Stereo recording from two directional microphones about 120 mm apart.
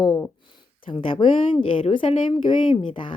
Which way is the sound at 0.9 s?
45° left (ahead or behind).